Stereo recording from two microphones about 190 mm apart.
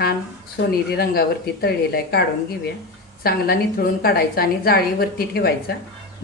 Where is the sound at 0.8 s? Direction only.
55° left (ahead or behind).